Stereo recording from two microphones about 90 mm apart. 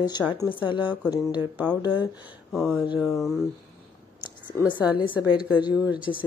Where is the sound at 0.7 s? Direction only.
65° left (ahead or behind).